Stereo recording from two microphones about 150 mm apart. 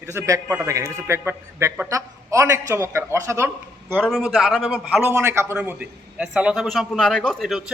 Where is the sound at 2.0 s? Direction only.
20° right (ahead or behind).